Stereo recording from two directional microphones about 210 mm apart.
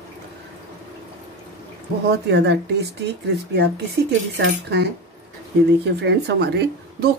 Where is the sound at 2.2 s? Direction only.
55° right (ahead or behind).